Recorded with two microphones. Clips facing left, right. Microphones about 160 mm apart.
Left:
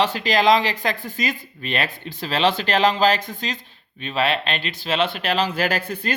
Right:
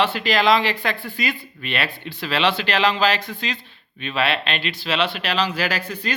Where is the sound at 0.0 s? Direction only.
40° left (ahead or behind).